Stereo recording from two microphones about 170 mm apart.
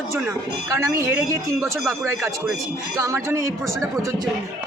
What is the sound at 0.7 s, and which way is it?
A man's voice, 15° right (ahead or behind).